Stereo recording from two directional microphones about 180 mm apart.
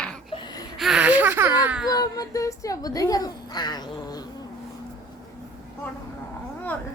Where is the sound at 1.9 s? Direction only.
20° left (ahead or behind).